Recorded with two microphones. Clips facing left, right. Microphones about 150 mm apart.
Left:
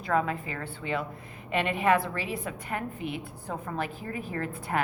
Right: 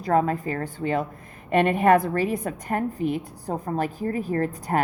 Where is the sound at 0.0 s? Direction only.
40° right (ahead or behind).